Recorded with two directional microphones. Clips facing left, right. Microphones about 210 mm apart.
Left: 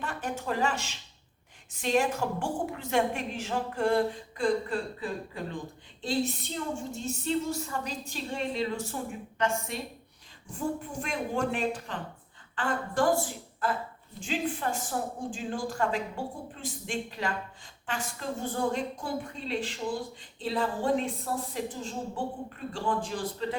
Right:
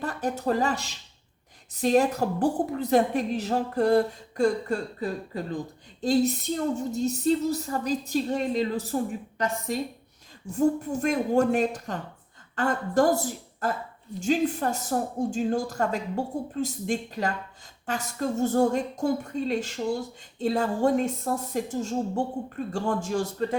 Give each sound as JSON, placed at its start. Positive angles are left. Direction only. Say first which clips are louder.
{"t": 0.0, "sound": "a woman's voice", "louder": "right 6 dB", "side_deg": -40}